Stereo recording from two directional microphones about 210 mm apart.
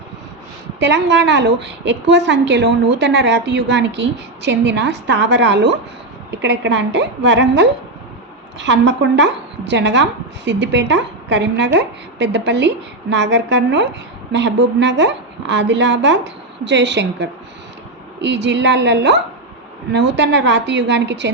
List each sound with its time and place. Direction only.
0.8 s speech: 55° right (ahead or behind)